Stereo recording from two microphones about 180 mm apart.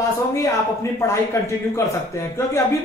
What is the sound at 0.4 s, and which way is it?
Speech, 15° left (ahead or behind).